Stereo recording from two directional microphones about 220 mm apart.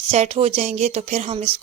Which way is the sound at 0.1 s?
30° right (ahead or behind).